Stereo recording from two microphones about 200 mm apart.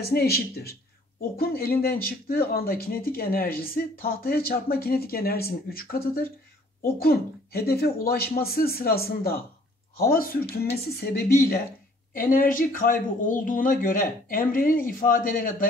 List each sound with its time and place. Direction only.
0.0 s speech: 50° left (ahead or behind)